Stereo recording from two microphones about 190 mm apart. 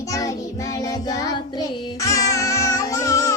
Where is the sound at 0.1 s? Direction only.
15° left (ahead or behind).